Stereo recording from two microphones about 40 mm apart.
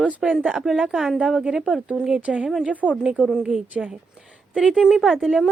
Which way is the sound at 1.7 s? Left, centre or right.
Right.